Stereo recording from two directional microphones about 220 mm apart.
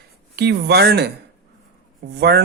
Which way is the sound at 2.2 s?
50° right (ahead or behind).